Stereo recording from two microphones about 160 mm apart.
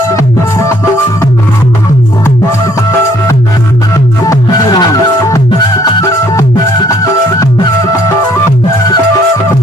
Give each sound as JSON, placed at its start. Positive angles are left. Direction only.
{"t": 0.1, "sound": "music", "side_deg": 20}
{"t": 4.8, "sound": "music", "side_deg": 20}